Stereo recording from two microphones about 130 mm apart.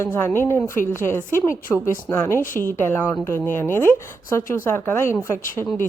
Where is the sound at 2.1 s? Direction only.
20° left (ahead or behind).